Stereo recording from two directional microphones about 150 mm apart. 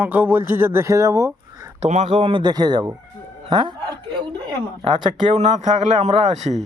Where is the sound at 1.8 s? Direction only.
50° right (ahead or behind); by 3.8 s 30° right (ahead or behind).